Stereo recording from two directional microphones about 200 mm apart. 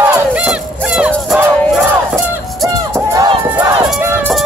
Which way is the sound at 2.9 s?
15° right (ahead or behind).